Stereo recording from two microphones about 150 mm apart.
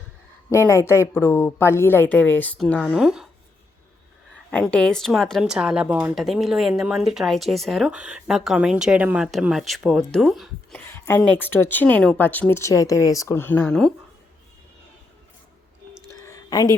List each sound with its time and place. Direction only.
0.5 s speech: 15° left (ahead or behind)
2.9 s a woman's voice: 5° right (ahead or behind)
4.5 s a woman's voice: 5° left (ahead or behind)
10.8 s speech: 15° left (ahead or behind)
16.2 s a sound: 25° left (ahead or behind)